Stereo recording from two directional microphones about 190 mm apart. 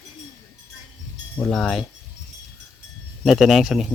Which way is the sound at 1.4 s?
5° left (ahead or behind).